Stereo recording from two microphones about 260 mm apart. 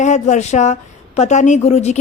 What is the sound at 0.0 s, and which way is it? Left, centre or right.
A woman's voice, left.